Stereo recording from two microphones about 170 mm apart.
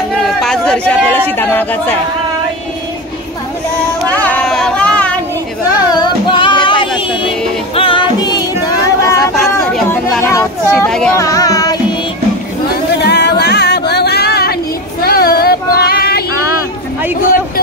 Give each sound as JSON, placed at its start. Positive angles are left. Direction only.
{"t": 0.4, "sound": "chatter", "side_deg": 5}
{"t": 4.1, "sound": "a sound", "side_deg": 10}
{"t": 5.8, "sound": "music", "side_deg": 25}
{"t": 9.3, "sound": "chatter", "side_deg": 0}
{"t": 10.2, "sound": "a sound", "side_deg": 15}
{"t": 10.9, "sound": "speech", "side_deg": 5}
{"t": 11.1, "sound": "child singing", "side_deg": 20}
{"t": 13.0, "sound": "a sound", "side_deg": 75}
{"t": 16.3, "sound": "vehicle", "side_deg": -15}